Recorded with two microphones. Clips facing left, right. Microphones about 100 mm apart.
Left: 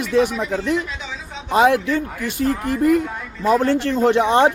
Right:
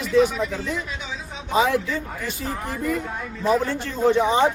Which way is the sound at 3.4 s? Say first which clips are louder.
Left 5 dB; 75° left (ahead or behind).